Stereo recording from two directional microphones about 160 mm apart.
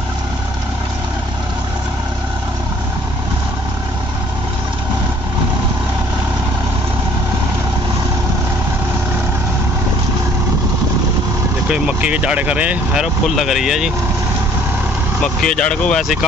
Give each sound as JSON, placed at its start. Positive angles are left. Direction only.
{"t": 11.7, "sound": "speech", "side_deg": -5}
{"t": 15.4, "sound": "speech", "side_deg": 5}